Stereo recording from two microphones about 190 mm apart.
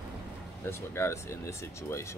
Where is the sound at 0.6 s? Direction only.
15° left (ahead or behind).